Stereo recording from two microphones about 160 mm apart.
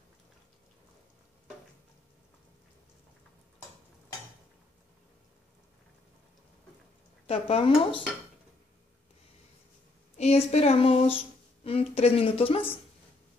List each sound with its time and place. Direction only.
7.2 s a woman's voice: 35° left (ahead or behind)
10.1 s a woman's voice: 45° left (ahead or behind)